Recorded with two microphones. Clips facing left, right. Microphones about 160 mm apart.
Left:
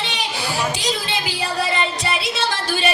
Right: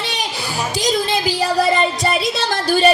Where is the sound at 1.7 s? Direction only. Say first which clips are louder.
Right 5 dB; 40° right (ahead or behind).